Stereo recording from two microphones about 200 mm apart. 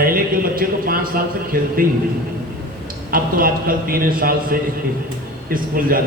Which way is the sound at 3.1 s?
45° right (ahead or behind).